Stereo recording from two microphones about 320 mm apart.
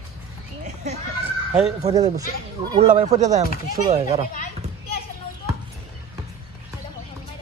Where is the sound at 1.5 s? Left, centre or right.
Centre.